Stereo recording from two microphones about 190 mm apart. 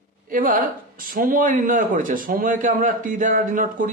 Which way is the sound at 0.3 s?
45° right (ahead or behind).